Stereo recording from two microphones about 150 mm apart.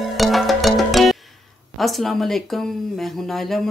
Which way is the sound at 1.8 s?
Centre (ahead or behind).